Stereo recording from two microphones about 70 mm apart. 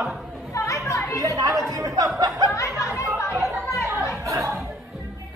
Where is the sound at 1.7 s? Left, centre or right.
Right.